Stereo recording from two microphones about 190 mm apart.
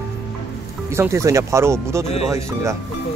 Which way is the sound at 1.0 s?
15° right (ahead or behind).